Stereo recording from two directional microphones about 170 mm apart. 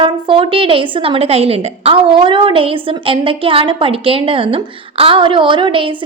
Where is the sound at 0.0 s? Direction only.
30° right (ahead or behind).